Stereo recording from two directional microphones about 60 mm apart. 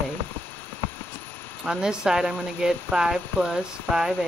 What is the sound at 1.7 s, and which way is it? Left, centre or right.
Speech, centre.